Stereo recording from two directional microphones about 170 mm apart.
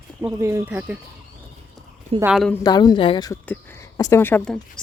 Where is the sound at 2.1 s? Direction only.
35° right (ahead or behind).